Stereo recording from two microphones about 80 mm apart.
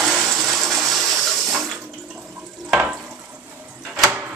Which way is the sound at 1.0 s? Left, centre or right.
Centre.